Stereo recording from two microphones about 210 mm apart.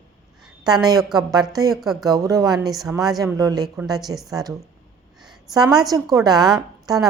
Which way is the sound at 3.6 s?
5° right (ahead or behind).